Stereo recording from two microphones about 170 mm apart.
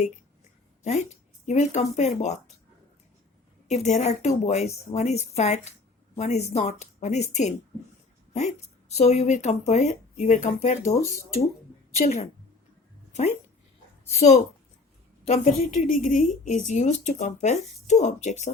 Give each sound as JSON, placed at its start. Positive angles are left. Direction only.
{"t": 1.5, "sound": "speech", "side_deg": 40}
{"t": 3.7, "sound": "a woman's voice", "side_deg": 40}
{"t": 14.1, "sound": "speech", "side_deg": 40}
{"t": 15.3, "sound": "a woman's voice", "side_deg": 50}